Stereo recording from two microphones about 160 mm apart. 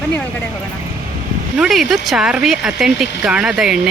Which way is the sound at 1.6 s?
Centre (ahead or behind).